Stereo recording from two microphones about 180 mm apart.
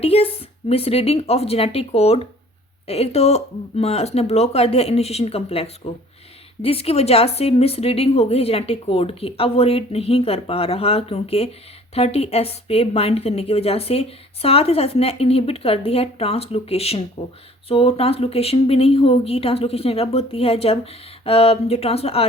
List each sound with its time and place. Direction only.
0.0 s a woman's voice: 30° left (ahead or behind)